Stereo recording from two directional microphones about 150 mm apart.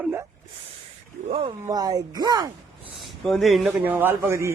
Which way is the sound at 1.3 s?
40° right (ahead or behind).